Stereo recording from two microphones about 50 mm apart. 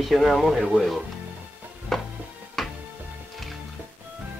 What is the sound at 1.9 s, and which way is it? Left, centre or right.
Music, centre.